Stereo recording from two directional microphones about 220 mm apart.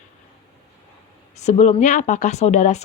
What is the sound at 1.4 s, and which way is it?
Speech, 30° left (ahead or behind).